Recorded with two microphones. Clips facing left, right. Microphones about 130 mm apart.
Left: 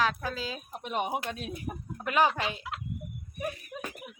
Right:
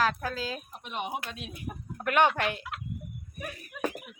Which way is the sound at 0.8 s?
40° left (ahead or behind).